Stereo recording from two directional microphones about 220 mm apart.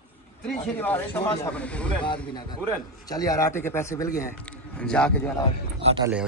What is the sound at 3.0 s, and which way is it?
Speech, 15° left (ahead or behind).